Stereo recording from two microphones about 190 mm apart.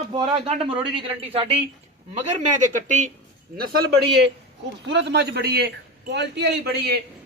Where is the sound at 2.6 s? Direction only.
40° right (ahead or behind).